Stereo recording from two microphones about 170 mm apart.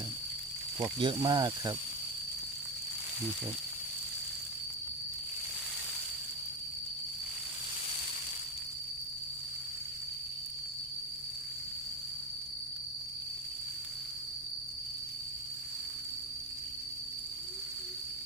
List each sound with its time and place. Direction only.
0.8 s speech: 25° right (ahead or behind)